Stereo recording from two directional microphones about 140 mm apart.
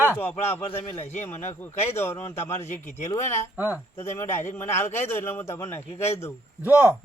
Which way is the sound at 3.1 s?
15° left (ahead or behind).